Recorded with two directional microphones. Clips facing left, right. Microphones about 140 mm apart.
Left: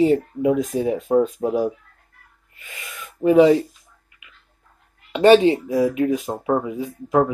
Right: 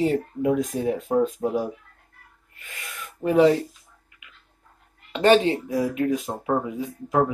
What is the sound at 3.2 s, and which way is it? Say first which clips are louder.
Speech: left 4 dB; 10° left (ahead or behind).